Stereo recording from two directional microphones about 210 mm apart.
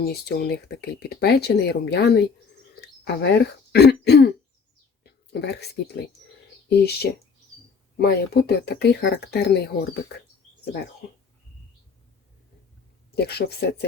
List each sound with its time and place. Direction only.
0.0 s speech: 50° left (ahead or behind)
13.1 s speech: 50° left (ahead or behind)